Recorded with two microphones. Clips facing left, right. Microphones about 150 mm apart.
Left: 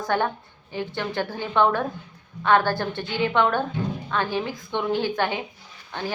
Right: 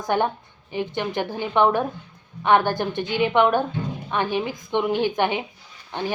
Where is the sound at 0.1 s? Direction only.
15° right (ahead or behind).